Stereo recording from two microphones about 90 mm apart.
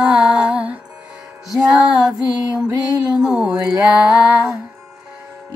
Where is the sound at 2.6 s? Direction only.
45° right (ahead or behind).